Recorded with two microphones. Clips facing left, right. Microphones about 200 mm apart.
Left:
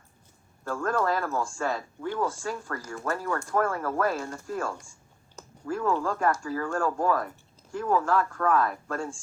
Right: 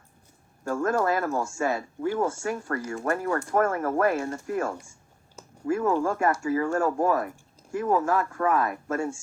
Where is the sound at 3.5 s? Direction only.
45° right (ahead or behind).